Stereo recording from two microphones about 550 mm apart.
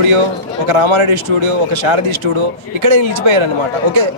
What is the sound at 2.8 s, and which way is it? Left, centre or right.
Speech, right.